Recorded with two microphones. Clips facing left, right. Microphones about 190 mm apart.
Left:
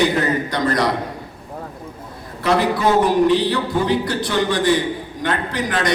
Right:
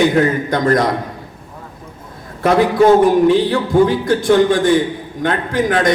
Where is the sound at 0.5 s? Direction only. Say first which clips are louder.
Right 6 dB; 50° right (ahead or behind).